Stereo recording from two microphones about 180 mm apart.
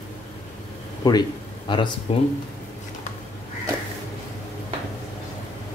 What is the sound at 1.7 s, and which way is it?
Speech, 25° left (ahead or behind).